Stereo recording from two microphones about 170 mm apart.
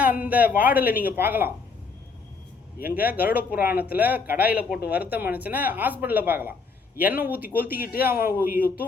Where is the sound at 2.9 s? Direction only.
10° right (ahead or behind).